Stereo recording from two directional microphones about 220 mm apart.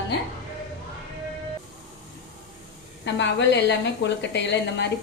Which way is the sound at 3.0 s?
55° left (ahead or behind).